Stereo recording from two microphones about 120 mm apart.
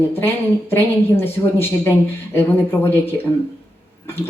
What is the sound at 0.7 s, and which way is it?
A woman's voice, 20° left (ahead or behind).